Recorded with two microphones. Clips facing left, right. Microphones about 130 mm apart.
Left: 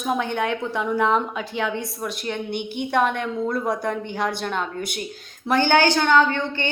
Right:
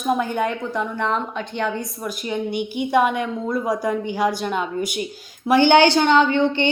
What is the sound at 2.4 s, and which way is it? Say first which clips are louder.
Speech: right 3 dB; 55° left (ahead or behind).